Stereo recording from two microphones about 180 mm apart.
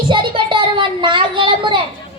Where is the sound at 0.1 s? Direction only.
25° right (ahead or behind).